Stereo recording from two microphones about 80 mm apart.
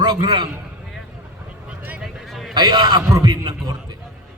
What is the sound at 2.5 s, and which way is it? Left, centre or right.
A man's voice, right.